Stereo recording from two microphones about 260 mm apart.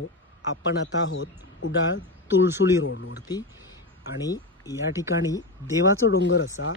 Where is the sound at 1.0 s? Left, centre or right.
Left.